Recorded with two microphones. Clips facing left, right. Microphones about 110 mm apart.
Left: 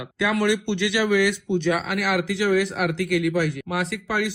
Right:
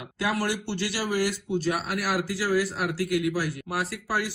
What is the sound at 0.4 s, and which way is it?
A man's voice, 60° left (ahead or behind).